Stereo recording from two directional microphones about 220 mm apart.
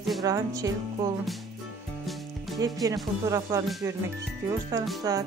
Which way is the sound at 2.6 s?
15° right (ahead or behind).